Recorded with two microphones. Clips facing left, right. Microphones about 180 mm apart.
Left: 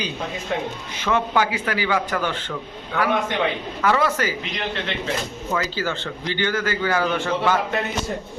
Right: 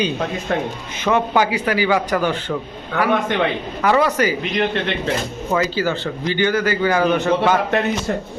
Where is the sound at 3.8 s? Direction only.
15° right (ahead or behind).